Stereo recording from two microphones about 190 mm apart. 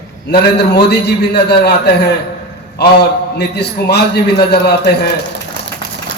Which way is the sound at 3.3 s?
60° left (ahead or behind).